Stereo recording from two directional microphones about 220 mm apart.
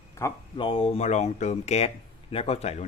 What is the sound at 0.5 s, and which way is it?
Speech, 25° left (ahead or behind).